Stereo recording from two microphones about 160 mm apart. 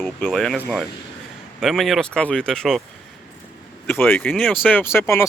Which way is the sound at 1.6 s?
Centre (ahead or behind).